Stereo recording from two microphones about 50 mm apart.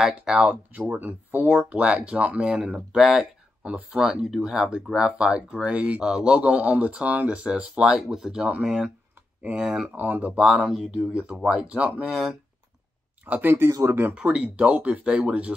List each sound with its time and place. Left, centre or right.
0.0 s speech: centre
0.7 s speech: right
1.7 s a man's voice: right
2.9 s a man's voice: centre
7.9 s speech: centre
9.4 s a man's voice: right
9.9 s speech: right
10.5 s speech: centre
11.4 s a man's voice: right
12.1 s speech: centre
13.4 s speech: right
13.7 s speech: right
14.1 s a man's voice: right